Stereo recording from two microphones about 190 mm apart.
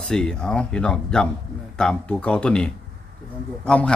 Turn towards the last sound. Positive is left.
turn(degrees=5)  # may be behind; listen again after turning